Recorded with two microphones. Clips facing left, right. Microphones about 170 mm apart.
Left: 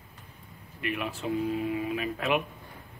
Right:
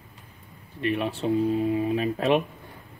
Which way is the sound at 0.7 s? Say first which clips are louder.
Right 6 dB; 30° right (ahead or behind).